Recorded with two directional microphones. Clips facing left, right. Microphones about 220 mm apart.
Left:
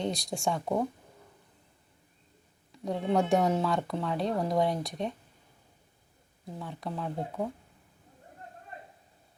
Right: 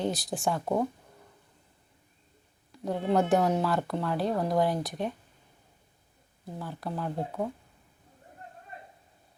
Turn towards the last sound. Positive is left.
turn(degrees=0)  # may be behind; listen again after turning